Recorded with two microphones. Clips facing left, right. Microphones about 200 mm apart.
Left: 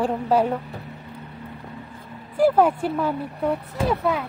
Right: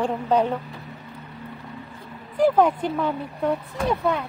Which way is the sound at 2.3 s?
5° left (ahead or behind).